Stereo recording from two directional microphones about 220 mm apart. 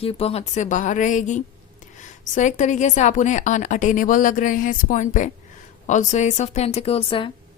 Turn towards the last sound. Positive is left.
turn(degrees=25)  # may be behind; listen again after turning